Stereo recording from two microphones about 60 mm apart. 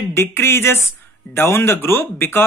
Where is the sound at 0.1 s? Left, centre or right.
Left.